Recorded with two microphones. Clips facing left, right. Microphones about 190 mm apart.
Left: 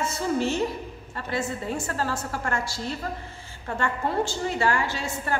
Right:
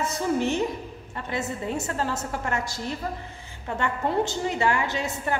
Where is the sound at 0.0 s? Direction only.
20° right (ahead or behind).